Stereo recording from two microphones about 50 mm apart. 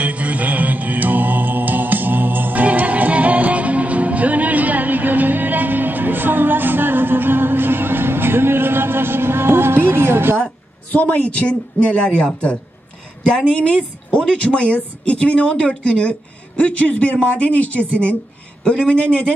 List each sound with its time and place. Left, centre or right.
0.0 s music: right
10.3 s a sound: left
11.0 s a woman's voice: left